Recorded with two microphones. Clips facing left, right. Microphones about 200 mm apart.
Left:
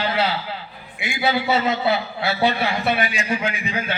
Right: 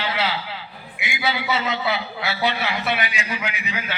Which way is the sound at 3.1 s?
40° left (ahead or behind).